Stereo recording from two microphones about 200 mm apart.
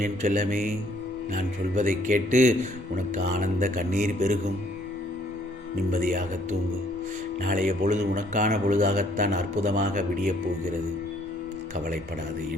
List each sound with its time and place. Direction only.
0.0 s speech: 40° right (ahead or behind)
5.9 s speech: 40° right (ahead or behind)